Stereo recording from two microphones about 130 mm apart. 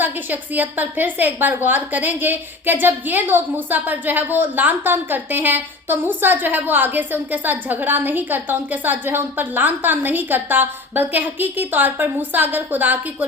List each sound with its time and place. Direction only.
0.0 s a woman's voice: 15° right (ahead or behind)